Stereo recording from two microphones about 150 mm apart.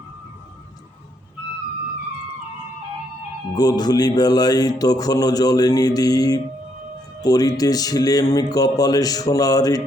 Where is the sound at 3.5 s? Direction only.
25° left (ahead or behind).